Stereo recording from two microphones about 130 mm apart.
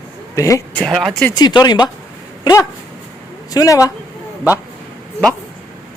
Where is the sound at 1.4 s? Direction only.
35° left (ahead or behind).